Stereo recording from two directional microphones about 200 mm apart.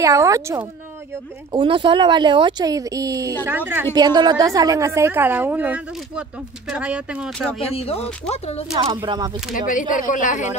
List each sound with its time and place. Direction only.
0.0 s a woman's voice: 15° right (ahead or behind)
3.9 s a woman's voice: 20° right (ahead or behind); by 7.6 s centre (ahead or behind)
7.7 s speech: 30° left (ahead or behind)
8.9 s speech: 20° right (ahead or behind)
9.6 s speech: 40° left (ahead or behind)